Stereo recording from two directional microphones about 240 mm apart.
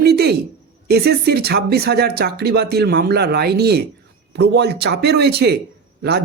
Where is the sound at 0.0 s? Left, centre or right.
Right.